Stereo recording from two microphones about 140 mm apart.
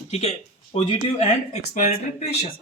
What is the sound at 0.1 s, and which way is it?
Speech, 50° left (ahead or behind).